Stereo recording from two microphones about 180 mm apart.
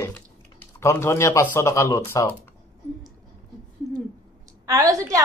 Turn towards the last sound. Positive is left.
turn(degrees=-20)  # may be behind; listen again after turning